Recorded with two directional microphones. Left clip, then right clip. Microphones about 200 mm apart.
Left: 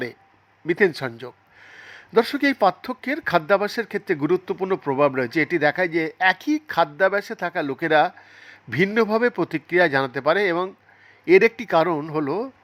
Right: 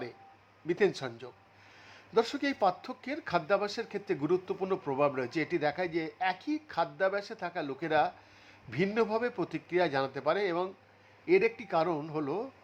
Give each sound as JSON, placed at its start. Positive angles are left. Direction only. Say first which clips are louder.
{"t": 0.7, "sound": "a man's voice", "louder": "left 9 dB", "side_deg": 25}